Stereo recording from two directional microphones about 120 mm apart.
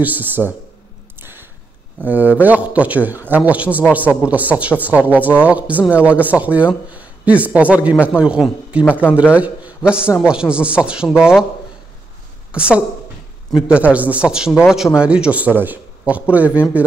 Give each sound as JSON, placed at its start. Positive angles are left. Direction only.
{"t": 0.0, "sound": "speech", "side_deg": -15}
{"t": 1.2, "sound": "a sound", "side_deg": -20}
{"t": 2.0, "sound": "a man's voice", "side_deg": -15}
{"t": 12.5, "sound": "speech", "side_deg": -10}